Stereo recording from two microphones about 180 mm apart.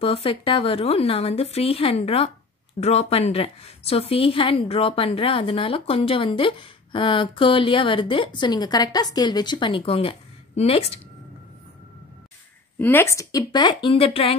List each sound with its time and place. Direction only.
0.0 s a woman's voice: 30° left (ahead or behind)
12.7 s a woman's voice: 10° left (ahead or behind); by 14.3 s 30° left (ahead or behind)